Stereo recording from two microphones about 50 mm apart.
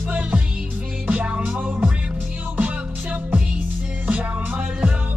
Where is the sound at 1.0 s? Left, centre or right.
Right.